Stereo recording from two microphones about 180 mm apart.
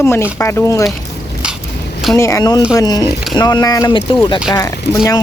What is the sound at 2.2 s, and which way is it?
Speech, 20° left (ahead or behind).